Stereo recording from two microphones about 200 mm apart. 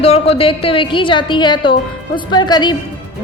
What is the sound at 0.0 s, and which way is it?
A woman's voice, 30° left (ahead or behind).